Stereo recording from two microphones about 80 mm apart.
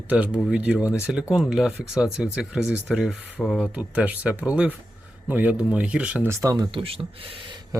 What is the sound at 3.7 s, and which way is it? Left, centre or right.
Speech, centre.